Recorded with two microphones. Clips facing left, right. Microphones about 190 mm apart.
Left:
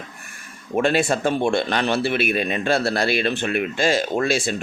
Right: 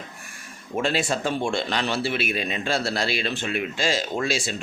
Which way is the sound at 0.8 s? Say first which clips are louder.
Left 5 dB; 55° left (ahead or behind).